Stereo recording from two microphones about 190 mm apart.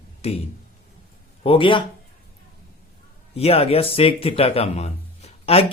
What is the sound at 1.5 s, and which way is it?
Speech, 25° left (ahead or behind).